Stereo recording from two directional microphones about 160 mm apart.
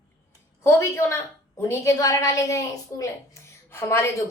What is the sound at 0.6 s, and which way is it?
A woman's voice, 20° left (ahead or behind).